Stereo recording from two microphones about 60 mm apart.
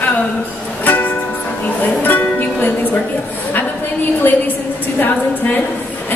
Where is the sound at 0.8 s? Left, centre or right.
Left.